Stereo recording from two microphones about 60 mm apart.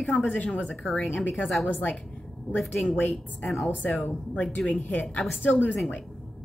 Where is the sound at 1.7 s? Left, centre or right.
Left.